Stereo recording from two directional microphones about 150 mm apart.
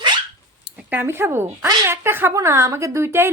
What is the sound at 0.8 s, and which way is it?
A woman's voice, 10° right (ahead or behind).